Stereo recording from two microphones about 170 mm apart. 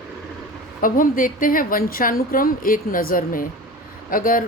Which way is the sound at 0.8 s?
55° left (ahead or behind).